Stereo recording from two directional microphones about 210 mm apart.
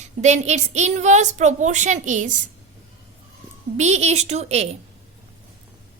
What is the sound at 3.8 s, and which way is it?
A woman's voice, 30° right (ahead or behind).